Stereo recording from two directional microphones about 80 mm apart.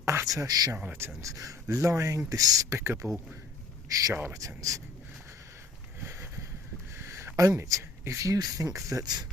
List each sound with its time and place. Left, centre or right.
0.0 s speech: right
0.9 s speech: right
1.3 s speech: right
4.1 s speech: right
4.4 s speech: right
6.0 s a sound: right
8.4 s speech: right